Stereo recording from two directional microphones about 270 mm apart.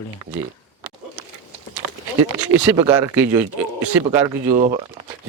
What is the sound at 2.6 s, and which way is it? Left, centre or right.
Speech, centre.